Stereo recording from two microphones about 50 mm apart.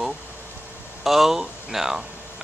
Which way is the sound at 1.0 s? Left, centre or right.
Centre.